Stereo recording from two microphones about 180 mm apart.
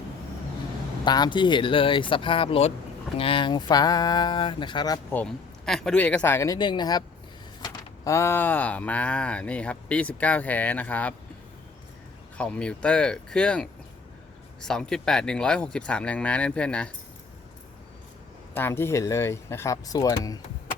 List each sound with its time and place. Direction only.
1.0 s speech: 25° left (ahead or behind)
5.1 s speech: 5° left (ahead or behind)
12.4 s speech: 5° left (ahead or behind)
18.5 s speech: 15° left (ahead or behind)